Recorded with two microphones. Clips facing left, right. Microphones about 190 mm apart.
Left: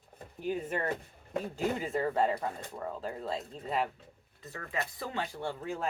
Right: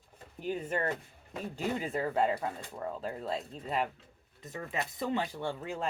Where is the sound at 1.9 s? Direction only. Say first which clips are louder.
Right 1 dB; centre (ahead or behind).